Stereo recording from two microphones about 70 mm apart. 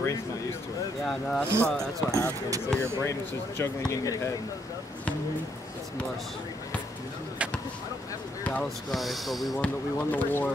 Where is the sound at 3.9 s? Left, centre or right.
Left.